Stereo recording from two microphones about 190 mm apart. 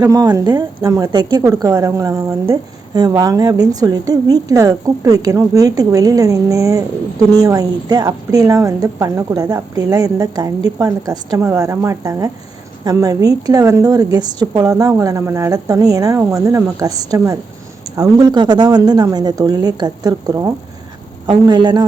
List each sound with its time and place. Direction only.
0.0 s a woman's voice: 20° right (ahead or behind)